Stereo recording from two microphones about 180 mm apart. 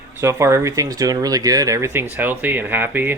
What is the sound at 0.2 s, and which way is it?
Speech, 15° right (ahead or behind).